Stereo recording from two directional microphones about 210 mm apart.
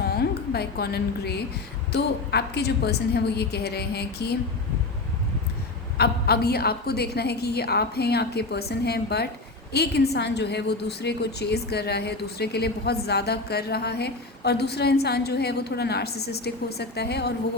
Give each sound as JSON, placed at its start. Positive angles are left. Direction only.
{"t": 0.0, "sound": "a woman's voice", "side_deg": 50}
{"t": 6.0, "sound": "a woman's voice", "side_deg": 50}